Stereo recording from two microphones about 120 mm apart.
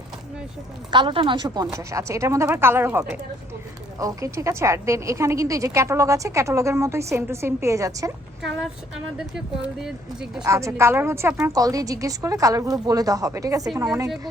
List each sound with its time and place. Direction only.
0.9 s a woman's voice: 40° right (ahead or behind); by 3.0 s 20° right (ahead or behind)
4.0 s a woman's voice: 25° right (ahead or behind)
8.4 s speech: centre (ahead or behind)
9.8 s speech: 5° right (ahead or behind)
10.4 s a woman's voice: 25° right (ahead or behind)